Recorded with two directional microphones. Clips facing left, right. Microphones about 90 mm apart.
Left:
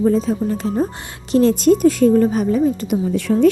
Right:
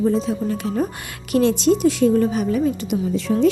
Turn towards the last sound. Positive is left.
turn(degrees=35)  # may be behind; listen again after turning